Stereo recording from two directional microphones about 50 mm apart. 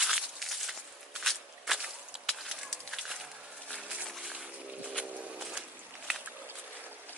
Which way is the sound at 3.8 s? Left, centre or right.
Right.